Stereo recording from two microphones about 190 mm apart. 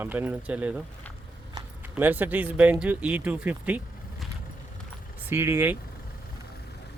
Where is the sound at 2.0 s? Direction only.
10° right (ahead or behind).